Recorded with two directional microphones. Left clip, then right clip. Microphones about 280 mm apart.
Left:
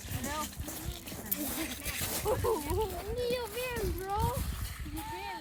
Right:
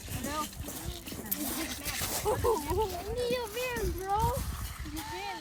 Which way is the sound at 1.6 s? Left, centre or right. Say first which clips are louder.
Right 2 dB; centre.